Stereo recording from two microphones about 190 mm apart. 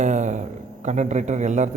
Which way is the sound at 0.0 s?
40° right (ahead or behind).